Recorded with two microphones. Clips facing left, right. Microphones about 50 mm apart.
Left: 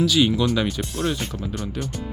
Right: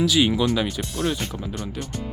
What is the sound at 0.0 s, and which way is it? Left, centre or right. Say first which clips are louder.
Speech: left 1 dB; centre.